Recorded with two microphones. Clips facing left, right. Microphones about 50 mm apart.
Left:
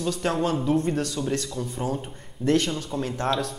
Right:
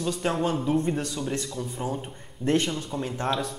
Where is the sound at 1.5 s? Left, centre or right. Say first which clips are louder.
Left 2 dB; centre.